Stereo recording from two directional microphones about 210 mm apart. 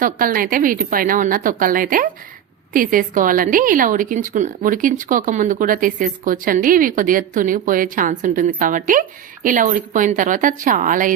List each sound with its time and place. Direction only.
0.0 s speech: 40° right (ahead or behind)